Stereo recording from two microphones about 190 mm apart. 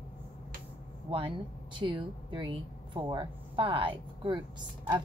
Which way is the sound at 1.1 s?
25° right (ahead or behind).